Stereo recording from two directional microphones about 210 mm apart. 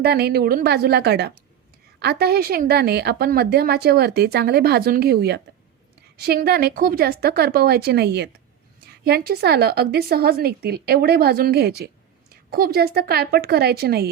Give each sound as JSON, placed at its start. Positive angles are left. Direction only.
{"t": 0.0, "sound": "a woman's voice", "side_deg": -50}